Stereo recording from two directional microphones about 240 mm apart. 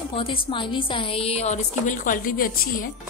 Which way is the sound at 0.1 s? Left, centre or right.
Left.